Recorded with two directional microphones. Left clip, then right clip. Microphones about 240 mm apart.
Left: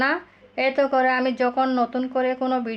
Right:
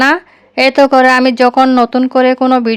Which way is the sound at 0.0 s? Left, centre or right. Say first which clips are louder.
Right 12 dB; right.